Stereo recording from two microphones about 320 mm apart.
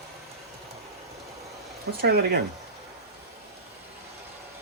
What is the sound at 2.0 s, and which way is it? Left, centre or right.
Speech, right.